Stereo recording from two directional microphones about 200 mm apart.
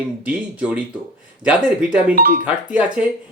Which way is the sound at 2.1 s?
45° right (ahead or behind).